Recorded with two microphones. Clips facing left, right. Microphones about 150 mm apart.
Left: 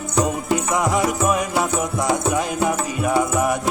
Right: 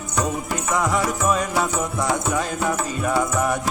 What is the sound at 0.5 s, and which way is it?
Music, 15° left (ahead or behind).